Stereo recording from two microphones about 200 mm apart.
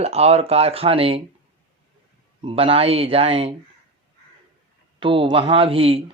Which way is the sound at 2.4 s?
30° right (ahead or behind).